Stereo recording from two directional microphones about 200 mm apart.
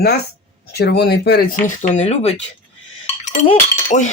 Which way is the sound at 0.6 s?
50° left (ahead or behind).